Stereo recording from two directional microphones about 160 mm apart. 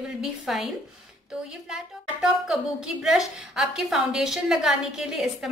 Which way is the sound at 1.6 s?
5° right (ahead or behind).